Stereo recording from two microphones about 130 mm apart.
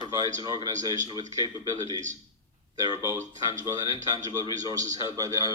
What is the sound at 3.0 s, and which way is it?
Speech, 25° right (ahead or behind).